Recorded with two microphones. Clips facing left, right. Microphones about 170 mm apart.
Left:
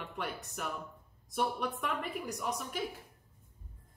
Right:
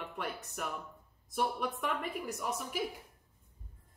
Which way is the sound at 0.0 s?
Centre (ahead or behind).